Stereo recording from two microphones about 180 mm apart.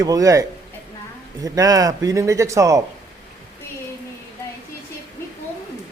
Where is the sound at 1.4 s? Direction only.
20° right (ahead or behind).